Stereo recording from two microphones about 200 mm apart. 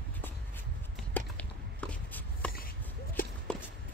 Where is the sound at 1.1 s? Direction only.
5° left (ahead or behind).